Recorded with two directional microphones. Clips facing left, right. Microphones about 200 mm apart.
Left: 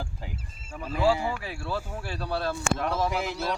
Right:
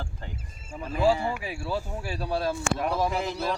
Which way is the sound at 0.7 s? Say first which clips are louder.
Right 1 dB; 10° right (ahead or behind).